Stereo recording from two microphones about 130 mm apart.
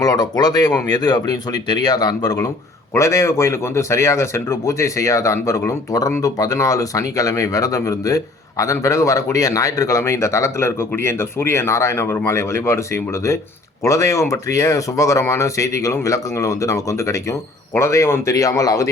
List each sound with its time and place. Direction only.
0.0 s speech: 30° left (ahead or behind)